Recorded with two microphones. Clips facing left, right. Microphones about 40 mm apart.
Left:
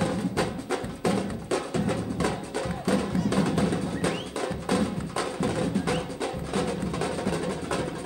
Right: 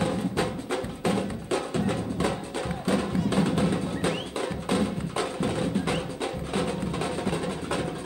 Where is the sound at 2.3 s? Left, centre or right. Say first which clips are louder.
Even; centre.